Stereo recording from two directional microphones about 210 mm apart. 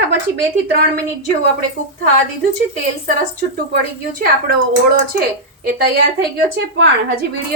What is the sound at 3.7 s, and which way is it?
Speech, 45° right (ahead or behind).